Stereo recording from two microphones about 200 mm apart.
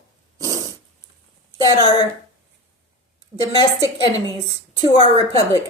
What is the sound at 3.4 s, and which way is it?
Speech, 20° left (ahead or behind).